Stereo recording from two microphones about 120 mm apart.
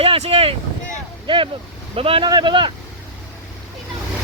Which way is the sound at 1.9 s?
50° right (ahead or behind).